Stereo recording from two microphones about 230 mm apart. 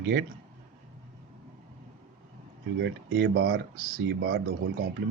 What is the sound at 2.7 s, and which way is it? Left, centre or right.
Speech, right.